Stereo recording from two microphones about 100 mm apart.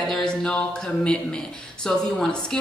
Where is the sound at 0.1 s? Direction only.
5° left (ahead or behind).